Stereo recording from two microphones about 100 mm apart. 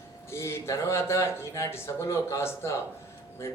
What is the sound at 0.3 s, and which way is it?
Speech, 25° left (ahead or behind).